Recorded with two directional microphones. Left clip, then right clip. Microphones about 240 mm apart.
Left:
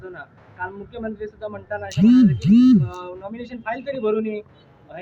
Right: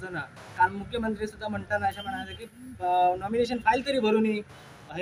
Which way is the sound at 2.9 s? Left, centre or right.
Right.